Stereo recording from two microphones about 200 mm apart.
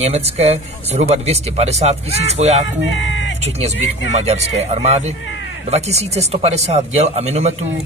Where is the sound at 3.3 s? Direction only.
30° right (ahead or behind).